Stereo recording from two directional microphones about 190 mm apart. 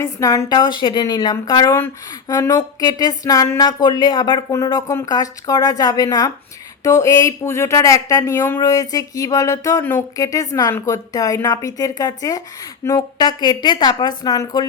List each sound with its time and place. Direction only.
0.0 s a woman's voice: 15° left (ahead or behind)